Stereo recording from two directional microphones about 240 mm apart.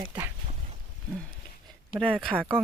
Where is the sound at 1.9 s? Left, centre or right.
Centre.